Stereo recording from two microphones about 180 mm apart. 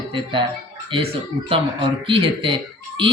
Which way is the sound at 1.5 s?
30° right (ahead or behind).